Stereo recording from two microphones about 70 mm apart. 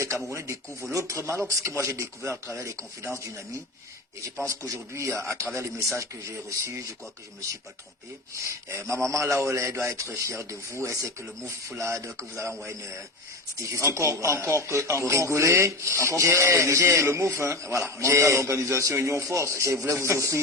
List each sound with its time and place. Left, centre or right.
0.3 s a man's voice: right
8.4 s a man's voice: right
13.6 s a man's voice: right